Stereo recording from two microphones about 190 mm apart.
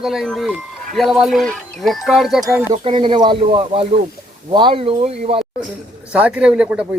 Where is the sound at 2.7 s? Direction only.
25° right (ahead or behind).